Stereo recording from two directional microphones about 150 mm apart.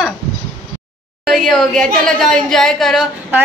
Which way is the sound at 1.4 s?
5° left (ahead or behind).